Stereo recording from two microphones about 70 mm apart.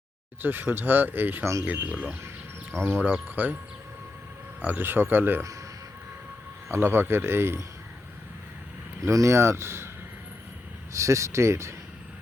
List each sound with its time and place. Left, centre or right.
0.4 s speech: right
2.8 s speech: right
4.6 s speech: right
6.7 s speech: right
9.0 s speech: right
10.9 s speech: right